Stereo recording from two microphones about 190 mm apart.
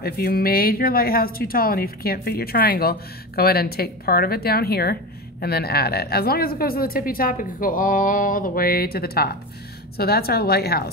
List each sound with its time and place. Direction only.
0.0 s a woman's voice: 50° left (ahead or behind)